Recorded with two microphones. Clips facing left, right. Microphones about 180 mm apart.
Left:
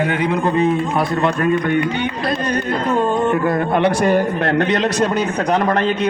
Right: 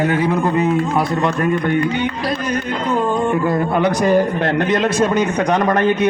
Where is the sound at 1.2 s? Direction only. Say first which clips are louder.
Left 1 dB; 20° left (ahead or behind).